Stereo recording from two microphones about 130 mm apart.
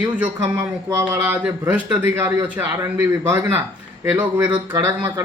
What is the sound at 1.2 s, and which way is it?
Speech, 5° right (ahead or behind).